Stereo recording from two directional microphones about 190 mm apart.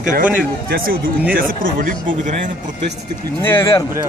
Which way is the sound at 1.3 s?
50° right (ahead or behind).